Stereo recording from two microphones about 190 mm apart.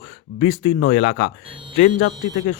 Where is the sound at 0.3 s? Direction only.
35° left (ahead or behind).